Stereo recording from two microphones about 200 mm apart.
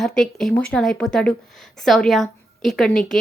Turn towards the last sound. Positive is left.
turn(degrees=0)  # may be behind; listen again after turning